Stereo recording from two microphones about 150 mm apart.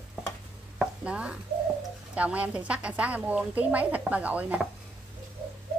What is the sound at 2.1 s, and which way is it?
A woman's voice, 10° right (ahead or behind).